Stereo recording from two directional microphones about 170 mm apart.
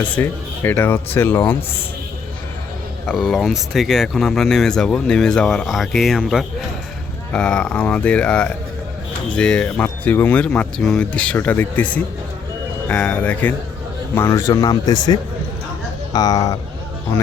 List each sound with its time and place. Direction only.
0.0 s speech: 10° left (ahead or behind)
3.1 s speech: centre (ahead or behind); by 16.6 s 20° left (ahead or behind)